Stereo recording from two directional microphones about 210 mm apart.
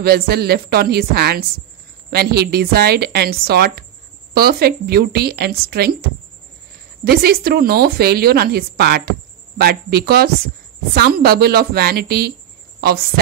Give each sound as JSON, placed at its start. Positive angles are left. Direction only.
{"t": 0.0, "sound": "speech", "side_deg": -50}
{"t": 7.1, "sound": "speech", "side_deg": -45}